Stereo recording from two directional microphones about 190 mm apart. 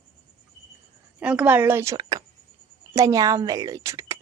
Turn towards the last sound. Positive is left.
turn(degrees=-15)  # may be behind; listen again after turning